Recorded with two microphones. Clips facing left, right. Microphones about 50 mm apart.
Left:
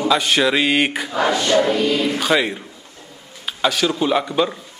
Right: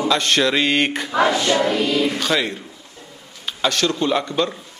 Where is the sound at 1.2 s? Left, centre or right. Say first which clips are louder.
Right 1 dB; centre.